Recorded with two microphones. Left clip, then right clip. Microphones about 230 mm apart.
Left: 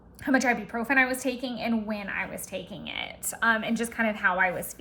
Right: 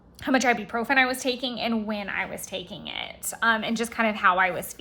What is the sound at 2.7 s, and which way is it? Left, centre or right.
A woman's voice, centre.